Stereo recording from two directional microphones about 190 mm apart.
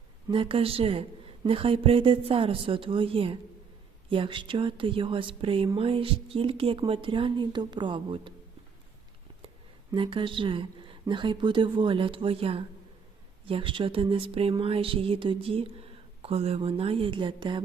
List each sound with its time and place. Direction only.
0.3 s speech: 30° right (ahead or behind)
9.9 s speech: 25° right (ahead or behind)